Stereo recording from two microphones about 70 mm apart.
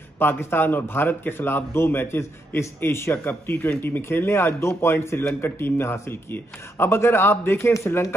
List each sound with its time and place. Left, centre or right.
0.2 s a man's voice: left